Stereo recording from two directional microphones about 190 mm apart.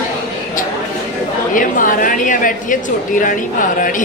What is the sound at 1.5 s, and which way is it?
A woman's voice, 45° left (ahead or behind).